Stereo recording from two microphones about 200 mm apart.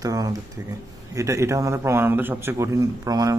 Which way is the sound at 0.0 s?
20° right (ahead or behind).